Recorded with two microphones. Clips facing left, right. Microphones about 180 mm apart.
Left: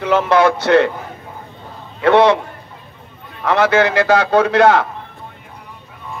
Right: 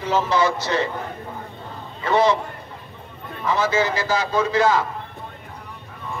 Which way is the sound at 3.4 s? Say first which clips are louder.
Left 7 dB; 70° left (ahead or behind).